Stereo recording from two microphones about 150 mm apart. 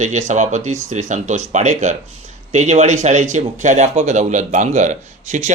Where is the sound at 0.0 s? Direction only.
50° right (ahead or behind).